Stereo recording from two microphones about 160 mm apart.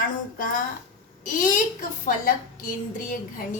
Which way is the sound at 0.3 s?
60° left (ahead or behind).